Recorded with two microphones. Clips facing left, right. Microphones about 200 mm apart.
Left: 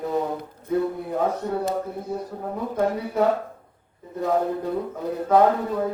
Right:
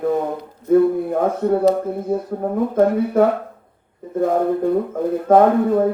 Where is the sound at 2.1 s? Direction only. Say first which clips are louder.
Right 8 dB; 55° right (ahead or behind).